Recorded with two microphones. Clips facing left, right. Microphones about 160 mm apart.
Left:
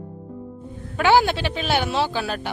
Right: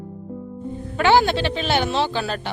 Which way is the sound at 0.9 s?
10° left (ahead or behind).